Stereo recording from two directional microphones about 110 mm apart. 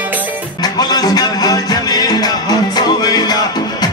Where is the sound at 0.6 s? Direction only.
40° left (ahead or behind).